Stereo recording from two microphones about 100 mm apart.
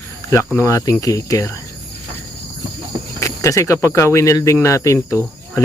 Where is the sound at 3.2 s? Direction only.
30° left (ahead or behind).